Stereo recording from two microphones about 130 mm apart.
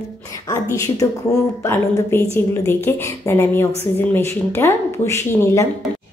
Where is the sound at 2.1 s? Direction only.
15° left (ahead or behind).